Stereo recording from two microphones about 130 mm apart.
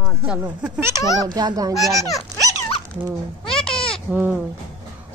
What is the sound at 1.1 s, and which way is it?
Speech, 30° right (ahead or behind).